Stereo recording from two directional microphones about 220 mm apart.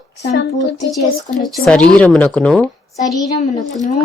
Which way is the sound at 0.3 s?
50° left (ahead or behind).